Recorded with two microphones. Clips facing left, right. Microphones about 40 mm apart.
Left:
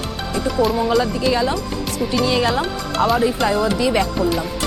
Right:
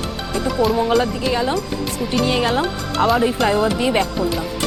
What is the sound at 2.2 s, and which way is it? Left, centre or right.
Speech, right.